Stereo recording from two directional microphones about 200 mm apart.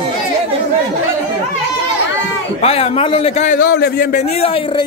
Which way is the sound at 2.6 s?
30° left (ahead or behind).